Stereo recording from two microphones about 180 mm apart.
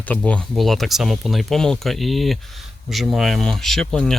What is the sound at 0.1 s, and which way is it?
Speech, 5° left (ahead or behind).